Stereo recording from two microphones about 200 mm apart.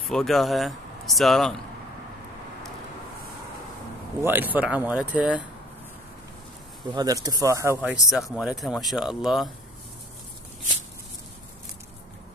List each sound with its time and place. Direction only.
0.1 s speech: centre (ahead or behind)
4.2 s speech: 10° right (ahead or behind)
6.9 s speech: 20° right (ahead or behind); by 9.5 s centre (ahead or behind)